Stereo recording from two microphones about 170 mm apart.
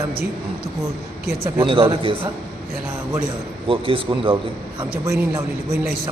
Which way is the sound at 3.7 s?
30° right (ahead or behind).